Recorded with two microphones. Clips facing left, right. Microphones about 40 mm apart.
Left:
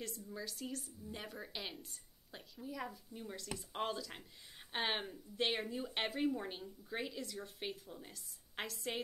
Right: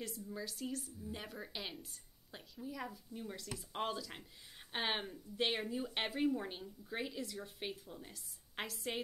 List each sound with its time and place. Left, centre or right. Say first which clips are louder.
0.0 s speech: right 1 dB; centre